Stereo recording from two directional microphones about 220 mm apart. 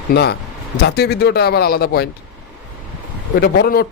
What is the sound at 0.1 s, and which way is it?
Speech, 50° left (ahead or behind).